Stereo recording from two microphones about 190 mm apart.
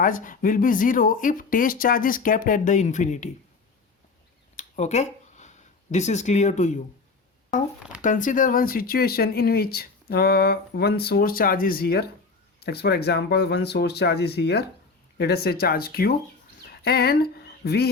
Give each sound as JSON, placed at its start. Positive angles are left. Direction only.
{"t": 0.0, "sound": "speech", "side_deg": 45}
{"t": 4.5, "sound": "a sound", "side_deg": 35}
{"t": 8.0, "sound": "speech", "side_deg": 45}